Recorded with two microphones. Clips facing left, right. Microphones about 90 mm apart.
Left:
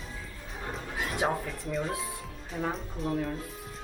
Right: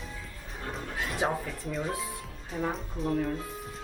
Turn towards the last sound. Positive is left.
turn(degrees=0)  # may be behind; listen again after turning